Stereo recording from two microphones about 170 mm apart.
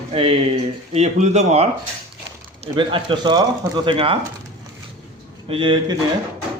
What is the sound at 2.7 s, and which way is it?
Speech, 30° right (ahead or behind).